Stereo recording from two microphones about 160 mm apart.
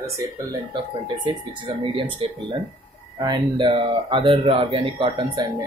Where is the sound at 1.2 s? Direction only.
30° right (ahead or behind).